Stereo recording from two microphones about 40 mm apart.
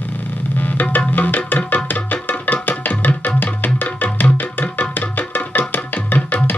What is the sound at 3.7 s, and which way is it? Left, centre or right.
Music, left.